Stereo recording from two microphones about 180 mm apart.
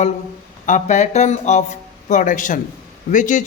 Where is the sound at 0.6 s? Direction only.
45° left (ahead or behind).